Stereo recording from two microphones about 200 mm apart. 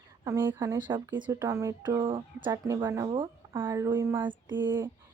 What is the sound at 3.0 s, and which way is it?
Speech, 25° right (ahead or behind).